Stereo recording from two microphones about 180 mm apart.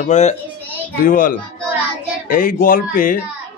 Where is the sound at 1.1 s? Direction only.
50° left (ahead or behind).